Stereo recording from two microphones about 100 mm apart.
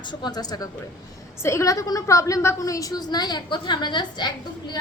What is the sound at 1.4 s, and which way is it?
A woman's voice, 30° left (ahead or behind).